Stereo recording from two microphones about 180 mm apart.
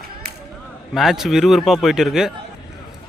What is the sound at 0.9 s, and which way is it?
A man's voice, centre (ahead or behind).